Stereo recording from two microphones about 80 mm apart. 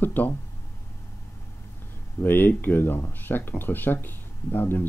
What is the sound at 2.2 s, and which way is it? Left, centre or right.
Speech, left.